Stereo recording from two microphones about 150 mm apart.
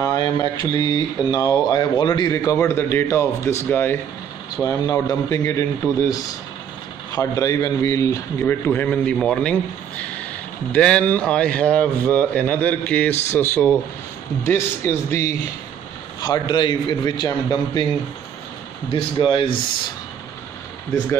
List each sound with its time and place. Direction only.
0.0 s a man's voice: 25° left (ahead or behind); by 9.6 s 5° left (ahead or behind)
10.7 s a man's voice: 10° left (ahead or behind)
16.2 s speech: 30° left (ahead or behind)
18.9 s speech: 35° left (ahead or behind)